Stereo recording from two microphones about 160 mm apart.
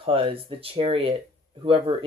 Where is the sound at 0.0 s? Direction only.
35° right (ahead or behind).